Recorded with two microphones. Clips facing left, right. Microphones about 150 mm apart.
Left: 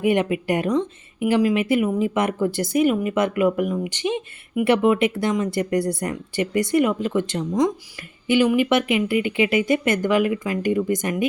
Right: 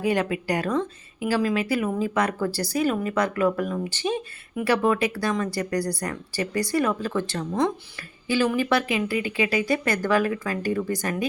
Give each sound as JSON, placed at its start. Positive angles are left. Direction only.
{"t": 0.0, "sound": "speech", "side_deg": 20}